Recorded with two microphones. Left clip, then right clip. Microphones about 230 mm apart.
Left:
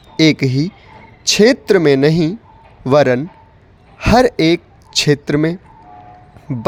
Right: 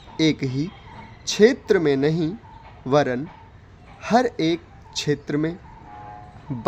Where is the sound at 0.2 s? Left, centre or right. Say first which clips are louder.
Left 9 dB; left.